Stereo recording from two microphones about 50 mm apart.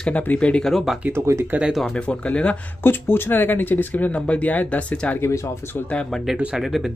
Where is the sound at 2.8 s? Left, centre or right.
Left.